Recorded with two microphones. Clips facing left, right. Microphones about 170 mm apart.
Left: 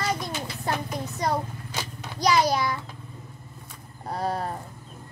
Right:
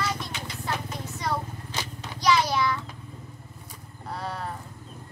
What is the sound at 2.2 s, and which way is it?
Child singing, 40° left (ahead or behind).